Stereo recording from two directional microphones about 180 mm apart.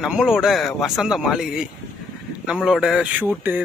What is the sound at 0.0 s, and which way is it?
A man's voice, 5° right (ahead or behind).